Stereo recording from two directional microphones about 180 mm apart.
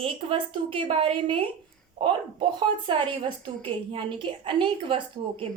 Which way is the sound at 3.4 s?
30° right (ahead or behind).